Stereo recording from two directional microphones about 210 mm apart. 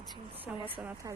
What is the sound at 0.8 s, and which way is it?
Speech, 10° right (ahead or behind).